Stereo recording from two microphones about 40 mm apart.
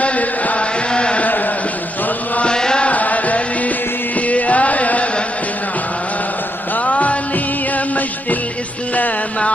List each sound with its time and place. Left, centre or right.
0.0 s chant: left
0.9 s a sound: left
2.4 s chant: centre
2.9 s music: left
6.8 s music: left